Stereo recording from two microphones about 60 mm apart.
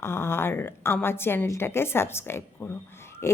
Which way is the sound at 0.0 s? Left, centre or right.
Left.